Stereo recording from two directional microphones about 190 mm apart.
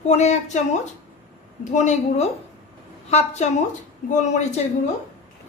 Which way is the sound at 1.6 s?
40° left (ahead or behind).